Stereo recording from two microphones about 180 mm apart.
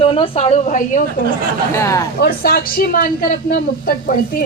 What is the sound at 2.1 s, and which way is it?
A woman's voice, 55° left (ahead or behind).